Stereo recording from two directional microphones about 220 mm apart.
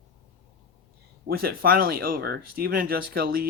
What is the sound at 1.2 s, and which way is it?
Speech, 45° right (ahead or behind).